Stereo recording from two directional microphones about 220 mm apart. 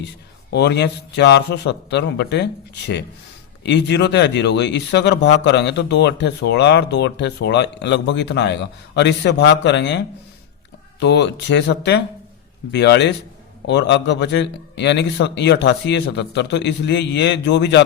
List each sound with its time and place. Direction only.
0.5 s speech: 50° left (ahead or behind)
11.0 s speech: 50° left (ahead or behind)